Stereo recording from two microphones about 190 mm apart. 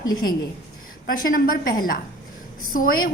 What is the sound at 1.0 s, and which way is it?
A woman's voice, 50° left (ahead or behind).